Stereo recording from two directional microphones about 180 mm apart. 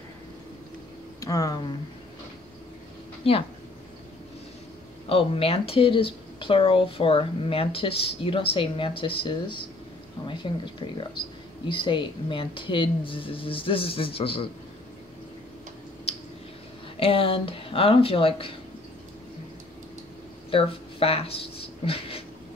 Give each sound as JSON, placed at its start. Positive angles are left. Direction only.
{"t": 1.2, "sound": "speech", "side_deg": 20}
{"t": 3.3, "sound": "speech", "side_deg": 30}
{"t": 5.0, "sound": "speech", "side_deg": 30}
{"t": 16.1, "sound": "a sound", "side_deg": 35}
{"t": 16.9, "sound": "speech", "side_deg": 30}
{"t": 20.5, "sound": "speech", "side_deg": 35}